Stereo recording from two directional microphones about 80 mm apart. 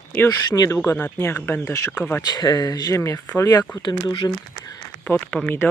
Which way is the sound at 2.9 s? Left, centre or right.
Left.